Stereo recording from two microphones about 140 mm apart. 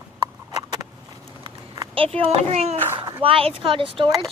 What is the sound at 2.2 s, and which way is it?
A child's voice, 50° right (ahead or behind).